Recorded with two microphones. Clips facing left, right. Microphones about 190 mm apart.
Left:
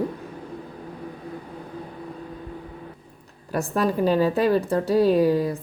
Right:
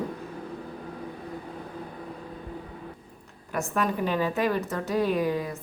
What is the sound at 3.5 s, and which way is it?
A woman's voice, 35° left (ahead or behind).